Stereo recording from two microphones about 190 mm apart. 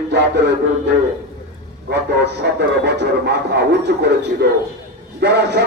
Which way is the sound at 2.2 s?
60° right (ahead or behind).